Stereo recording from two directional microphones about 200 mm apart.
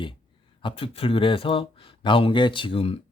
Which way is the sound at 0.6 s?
30° left (ahead or behind).